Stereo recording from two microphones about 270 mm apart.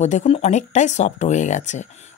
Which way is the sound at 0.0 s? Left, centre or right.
Left.